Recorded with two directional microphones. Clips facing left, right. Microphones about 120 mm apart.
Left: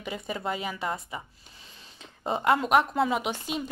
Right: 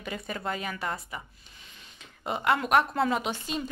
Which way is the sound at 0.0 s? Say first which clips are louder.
Left 2 dB; 20° left (ahead or behind).